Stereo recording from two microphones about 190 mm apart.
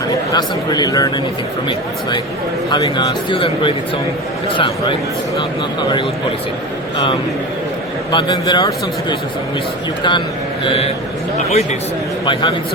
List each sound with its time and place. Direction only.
0.3 s a man's voice: 20° left (ahead or behind)
8.1 s a man's voice: 25° left (ahead or behind)